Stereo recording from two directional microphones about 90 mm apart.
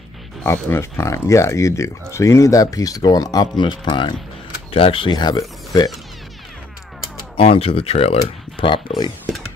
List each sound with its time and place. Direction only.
0.5 s speech: 30° left (ahead or behind); by 4.1 s 65° left (ahead or behind)
4.7 s speech: 85° left
5.1 s speech: 50° left (ahead or behind)
7.3 s speech: 90° left; by 8.8 s 70° left (ahead or behind)